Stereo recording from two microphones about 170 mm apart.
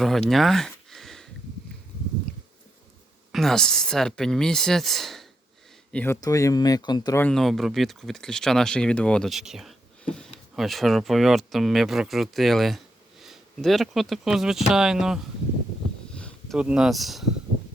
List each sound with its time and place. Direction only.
0.3 s a sound: centre (ahead or behind)
3.3 s speech: centre (ahead or behind)
6.2 s speech: 20° left (ahead or behind)
7.2 s speech: 5° left (ahead or behind)
16.1 s a sound: 5° left (ahead or behind)
16.6 s speech: 5° right (ahead or behind)